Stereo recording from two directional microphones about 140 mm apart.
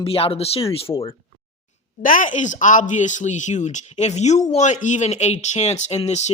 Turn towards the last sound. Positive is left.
turn(degrees=50)  # may be behind; listen again after turning